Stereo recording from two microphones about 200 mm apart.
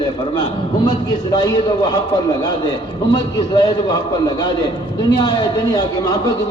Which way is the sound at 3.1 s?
20° left (ahead or behind).